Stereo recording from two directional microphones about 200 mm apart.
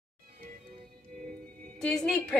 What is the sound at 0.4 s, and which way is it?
Music, 40° right (ahead or behind).